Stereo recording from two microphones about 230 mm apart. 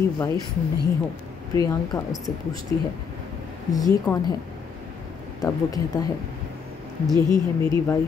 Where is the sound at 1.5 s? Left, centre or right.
Centre.